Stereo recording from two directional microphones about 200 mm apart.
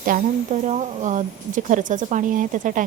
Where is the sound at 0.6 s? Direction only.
35° right (ahead or behind).